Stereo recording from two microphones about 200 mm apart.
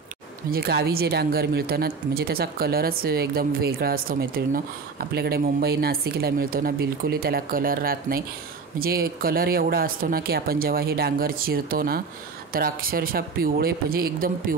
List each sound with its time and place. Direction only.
0.5 s speech: 50° right (ahead or behind)